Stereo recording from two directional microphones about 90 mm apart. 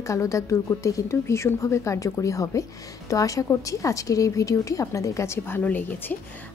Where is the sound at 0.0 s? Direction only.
35° left (ahead or behind).